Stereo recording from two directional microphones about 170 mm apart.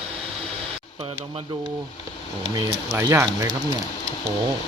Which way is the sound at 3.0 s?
15° right (ahead or behind).